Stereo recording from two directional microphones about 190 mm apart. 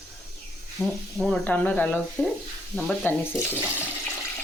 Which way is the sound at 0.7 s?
5° left (ahead or behind).